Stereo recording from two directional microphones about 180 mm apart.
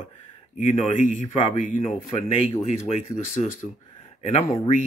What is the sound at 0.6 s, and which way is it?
Speech, 40° left (ahead or behind).